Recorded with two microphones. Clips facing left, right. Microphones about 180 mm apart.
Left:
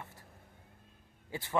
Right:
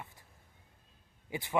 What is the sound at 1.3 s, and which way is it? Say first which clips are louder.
Speech: right 2 dB; 15° right (ahead or behind).